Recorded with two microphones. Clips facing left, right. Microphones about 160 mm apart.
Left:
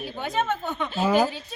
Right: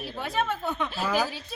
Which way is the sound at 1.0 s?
25° left (ahead or behind).